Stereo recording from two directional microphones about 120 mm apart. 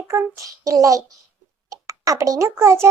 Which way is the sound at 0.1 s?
25° right (ahead or behind).